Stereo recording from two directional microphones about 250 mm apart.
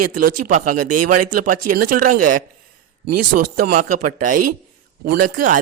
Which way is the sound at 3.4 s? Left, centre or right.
Right.